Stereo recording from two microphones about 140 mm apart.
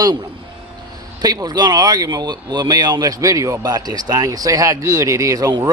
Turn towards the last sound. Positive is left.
turn(degrees=-30)  # may be behind; listen again after turning